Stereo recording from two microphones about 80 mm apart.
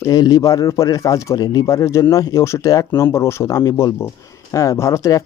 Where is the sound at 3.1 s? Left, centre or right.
Left.